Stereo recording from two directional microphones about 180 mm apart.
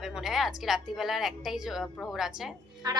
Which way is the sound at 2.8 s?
20° right (ahead or behind).